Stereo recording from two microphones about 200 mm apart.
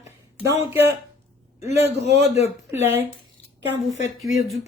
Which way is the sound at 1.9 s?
55° right (ahead or behind).